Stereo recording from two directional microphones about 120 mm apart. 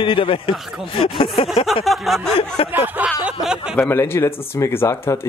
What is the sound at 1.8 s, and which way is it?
Speech, centre (ahead or behind).